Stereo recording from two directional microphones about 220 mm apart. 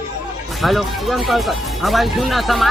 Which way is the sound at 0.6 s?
Centre (ahead or behind).